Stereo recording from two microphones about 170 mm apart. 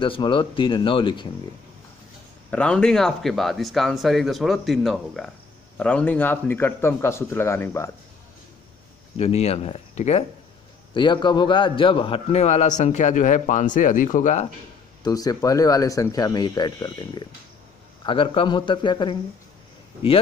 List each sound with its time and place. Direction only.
0.0 s speech: 30° left (ahead or behind)
2.5 s a man's voice: 5° left (ahead or behind)
9.1 s a man's voice: 35° left (ahead or behind)
11.0 s a man's voice: 25° left (ahead or behind); by 14.5 s 45° left (ahead or behind)
15.0 s a man's voice: 20° left (ahead or behind)